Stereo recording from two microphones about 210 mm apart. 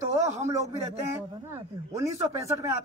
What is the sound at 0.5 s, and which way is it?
A man's voice, 15° right (ahead or behind).